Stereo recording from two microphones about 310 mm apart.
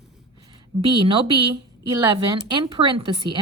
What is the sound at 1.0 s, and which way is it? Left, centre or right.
A woman's voice, centre.